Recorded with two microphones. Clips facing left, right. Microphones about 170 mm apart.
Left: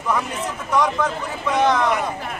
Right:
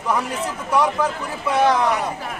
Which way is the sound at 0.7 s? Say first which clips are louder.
Right 1 dB; 10° right (ahead or behind).